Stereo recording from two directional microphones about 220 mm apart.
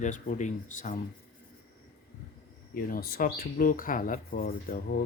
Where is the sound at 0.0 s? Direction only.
35° left (ahead or behind).